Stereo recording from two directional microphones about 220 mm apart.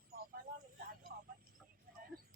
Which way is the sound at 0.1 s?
40° right (ahead or behind).